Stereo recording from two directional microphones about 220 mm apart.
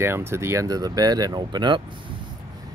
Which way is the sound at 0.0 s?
10° right (ahead or behind).